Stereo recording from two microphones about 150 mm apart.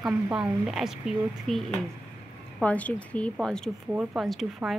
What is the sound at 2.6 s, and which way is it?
Speech, 10° left (ahead or behind).